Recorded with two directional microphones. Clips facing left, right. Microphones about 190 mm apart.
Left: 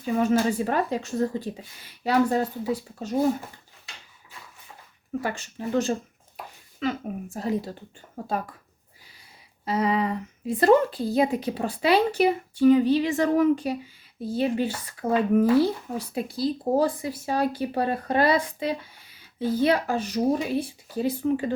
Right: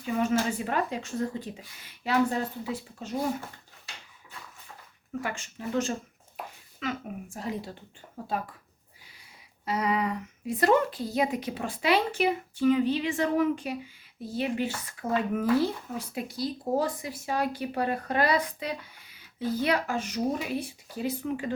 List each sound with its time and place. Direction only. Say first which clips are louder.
0.0 s speech: left 4 dB; 40° left (ahead or behind)
5.2 s speech: left 3 dB; 35° left (ahead or behind)
9.6 s speech: left 4 dB; 30° left (ahead or behind)